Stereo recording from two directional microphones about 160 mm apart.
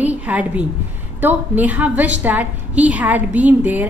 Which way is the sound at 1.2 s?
10° right (ahead or behind).